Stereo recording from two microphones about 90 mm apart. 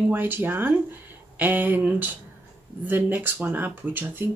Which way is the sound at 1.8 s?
10° right (ahead or behind).